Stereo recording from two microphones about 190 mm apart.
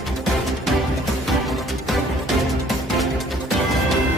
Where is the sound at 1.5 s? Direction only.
Centre (ahead or behind).